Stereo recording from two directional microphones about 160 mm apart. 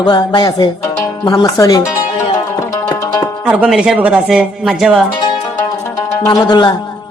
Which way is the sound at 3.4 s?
10° right (ahead or behind).